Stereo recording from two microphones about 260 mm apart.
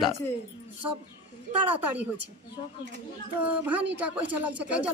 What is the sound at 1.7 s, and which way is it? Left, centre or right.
Speech, centre.